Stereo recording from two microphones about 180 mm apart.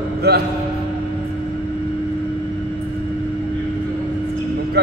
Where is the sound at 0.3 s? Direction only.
65° right (ahead or behind).